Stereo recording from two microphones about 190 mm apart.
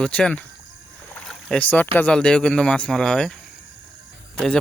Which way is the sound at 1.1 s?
5° left (ahead or behind).